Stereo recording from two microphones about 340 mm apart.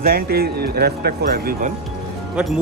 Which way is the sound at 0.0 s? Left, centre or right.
Right.